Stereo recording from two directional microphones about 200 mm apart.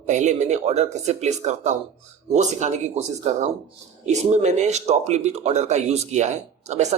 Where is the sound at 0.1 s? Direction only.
35° right (ahead or behind).